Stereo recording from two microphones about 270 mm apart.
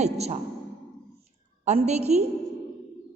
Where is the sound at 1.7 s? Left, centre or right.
Right.